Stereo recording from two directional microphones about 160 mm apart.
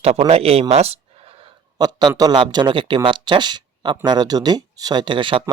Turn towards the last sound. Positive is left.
turn(degrees=-30)  # may be behind; listen again after turning